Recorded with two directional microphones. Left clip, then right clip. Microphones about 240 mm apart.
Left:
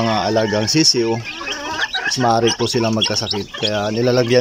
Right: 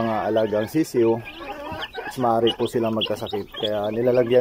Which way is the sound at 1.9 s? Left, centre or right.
Centre.